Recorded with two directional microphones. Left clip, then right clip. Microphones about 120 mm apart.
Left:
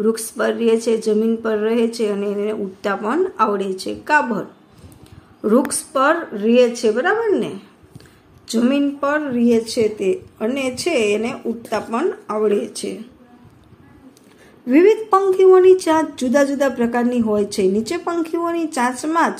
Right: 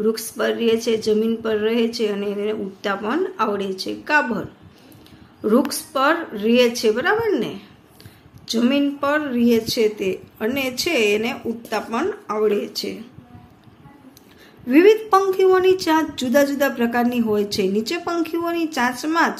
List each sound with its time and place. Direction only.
0.0 s a woman's voice: 30° left (ahead or behind)
14.7 s a woman's voice: 30° left (ahead or behind)